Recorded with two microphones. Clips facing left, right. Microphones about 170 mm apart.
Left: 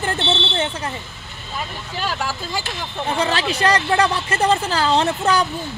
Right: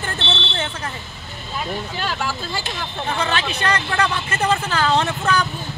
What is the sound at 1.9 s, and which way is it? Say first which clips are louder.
Speech: even; 10° left (ahead or behind).